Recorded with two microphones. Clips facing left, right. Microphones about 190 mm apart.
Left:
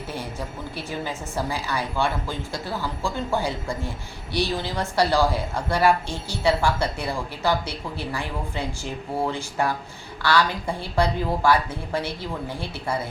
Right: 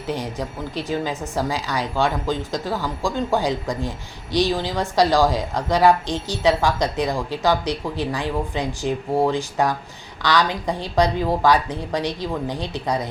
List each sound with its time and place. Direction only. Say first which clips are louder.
0.1 s a woman's voice: right 8 dB; 15° right (ahead or behind)